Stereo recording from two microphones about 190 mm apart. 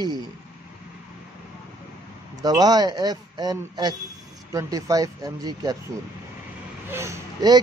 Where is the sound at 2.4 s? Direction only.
20° right (ahead or behind).